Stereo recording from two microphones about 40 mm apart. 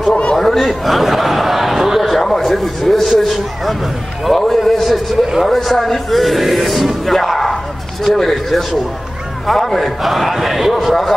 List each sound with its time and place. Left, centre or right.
0.1 s a man's voice: left
0.4 s a sound: centre
2.2 s a man's voice: centre
4.4 s speech: centre